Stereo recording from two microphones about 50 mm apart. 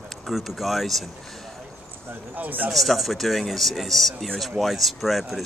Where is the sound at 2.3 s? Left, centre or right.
Right.